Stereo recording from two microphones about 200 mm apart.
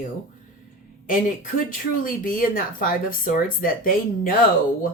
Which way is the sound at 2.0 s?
45° left (ahead or behind).